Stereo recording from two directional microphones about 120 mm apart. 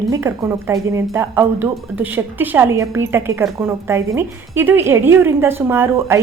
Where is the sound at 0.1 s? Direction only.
25° right (ahead or behind).